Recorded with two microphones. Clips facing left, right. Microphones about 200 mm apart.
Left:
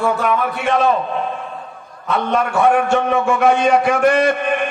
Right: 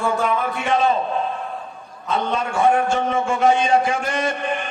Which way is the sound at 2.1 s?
65° left (ahead or behind).